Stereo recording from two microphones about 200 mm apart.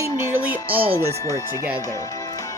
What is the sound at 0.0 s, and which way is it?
Music, 10° right (ahead or behind).